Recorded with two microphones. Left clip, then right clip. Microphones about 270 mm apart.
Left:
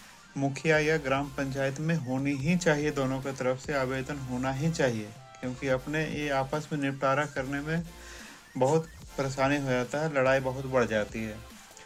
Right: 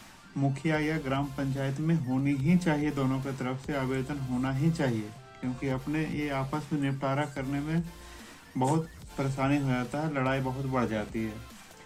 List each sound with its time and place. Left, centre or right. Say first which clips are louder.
0.3 s a man's voice: left 4 dB; left
9.1 s a man's voice: left 2 dB; left